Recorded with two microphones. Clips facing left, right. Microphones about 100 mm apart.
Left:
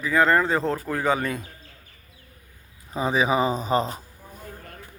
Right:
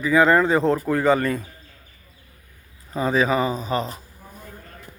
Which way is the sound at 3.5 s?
35° left (ahead or behind).